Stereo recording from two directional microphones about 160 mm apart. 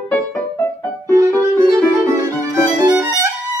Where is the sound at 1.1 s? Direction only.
20° right (ahead or behind).